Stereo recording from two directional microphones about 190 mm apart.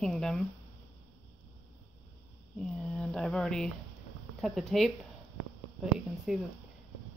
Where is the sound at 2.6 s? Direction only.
5° left (ahead or behind).